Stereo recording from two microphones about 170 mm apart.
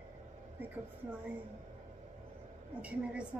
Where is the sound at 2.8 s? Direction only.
5° right (ahead or behind).